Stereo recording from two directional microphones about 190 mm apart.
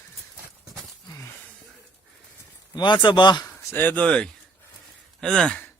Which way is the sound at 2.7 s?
25° left (ahead or behind).